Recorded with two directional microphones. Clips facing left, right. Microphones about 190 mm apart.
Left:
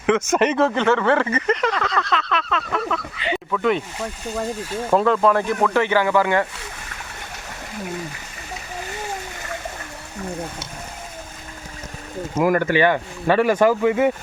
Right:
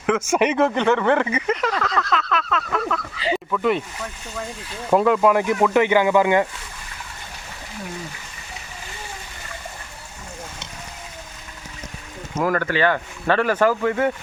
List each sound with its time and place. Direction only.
0.0 s speech: 5° right (ahead or behind)
3.9 s speech: 30° left (ahead or behind)
4.9 s speech: 10° right (ahead or behind)
12.4 s speech: 15° left (ahead or behind)